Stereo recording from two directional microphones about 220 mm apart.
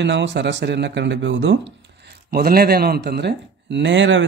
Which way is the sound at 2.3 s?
45° right (ahead or behind).